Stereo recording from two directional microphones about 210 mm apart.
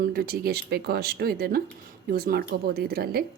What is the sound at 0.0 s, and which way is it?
A woman's voice, 45° right (ahead or behind).